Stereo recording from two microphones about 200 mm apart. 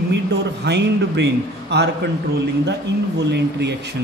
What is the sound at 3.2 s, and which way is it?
Speech, 60° right (ahead or behind).